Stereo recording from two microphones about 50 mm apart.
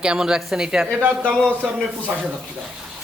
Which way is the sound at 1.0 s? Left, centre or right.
Right.